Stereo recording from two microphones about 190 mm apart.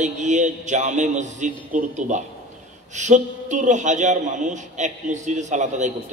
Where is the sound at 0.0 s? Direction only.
40° right (ahead or behind).